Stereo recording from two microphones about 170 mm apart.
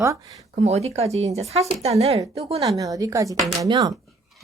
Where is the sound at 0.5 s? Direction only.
40° right (ahead or behind).